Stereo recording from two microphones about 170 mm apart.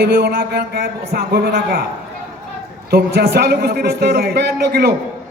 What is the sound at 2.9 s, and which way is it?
A man's voice, 70° right (ahead or behind).